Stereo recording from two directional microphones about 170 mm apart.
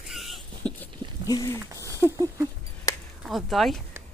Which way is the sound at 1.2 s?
20° left (ahead or behind).